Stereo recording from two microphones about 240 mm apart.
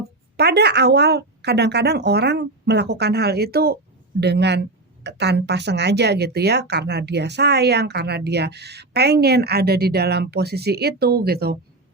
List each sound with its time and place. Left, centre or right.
0.3 s speech: right